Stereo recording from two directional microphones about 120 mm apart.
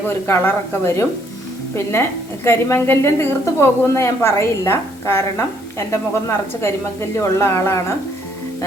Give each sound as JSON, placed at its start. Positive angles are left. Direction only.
{"t": 0.1, "sound": "a woman's voice", "side_deg": 20}